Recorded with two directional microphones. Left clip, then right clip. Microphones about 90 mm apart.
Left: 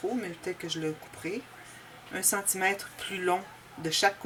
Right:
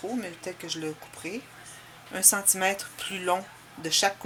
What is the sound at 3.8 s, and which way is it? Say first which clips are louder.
Speech: right 1 dB; 25° right (ahead or behind).